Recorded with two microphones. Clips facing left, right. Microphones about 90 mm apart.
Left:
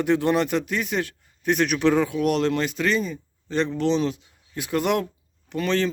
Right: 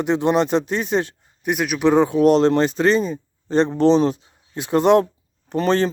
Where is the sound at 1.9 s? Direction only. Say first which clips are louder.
Right 7 dB; 30° right (ahead or behind).